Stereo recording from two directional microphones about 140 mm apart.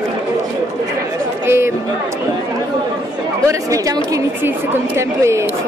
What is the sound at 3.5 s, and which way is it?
A woman's voice, 25° right (ahead or behind).